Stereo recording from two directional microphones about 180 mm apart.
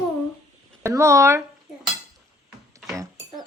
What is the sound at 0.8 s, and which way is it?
Speech, 15° right (ahead or behind).